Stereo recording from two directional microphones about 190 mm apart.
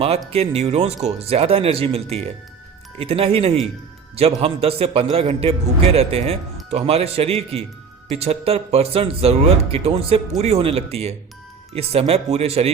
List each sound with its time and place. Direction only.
0.3 s speech: 30° right (ahead or behind)